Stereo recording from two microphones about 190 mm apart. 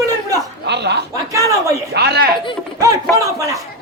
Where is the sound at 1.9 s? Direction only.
60° right (ahead or behind).